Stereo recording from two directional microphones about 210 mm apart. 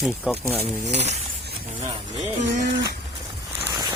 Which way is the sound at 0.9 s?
30° right (ahead or behind).